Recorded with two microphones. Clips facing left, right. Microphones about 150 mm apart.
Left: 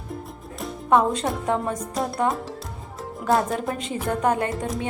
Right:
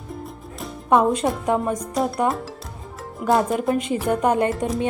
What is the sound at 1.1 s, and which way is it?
A woman's voice, 10° right (ahead or behind).